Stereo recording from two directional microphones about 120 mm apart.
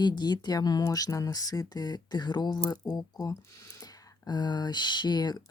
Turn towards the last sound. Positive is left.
turn(degrees=35)  # may be behind; listen again after turning